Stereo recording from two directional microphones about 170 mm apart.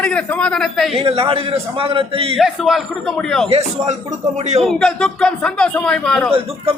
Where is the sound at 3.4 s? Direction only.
35° right (ahead or behind).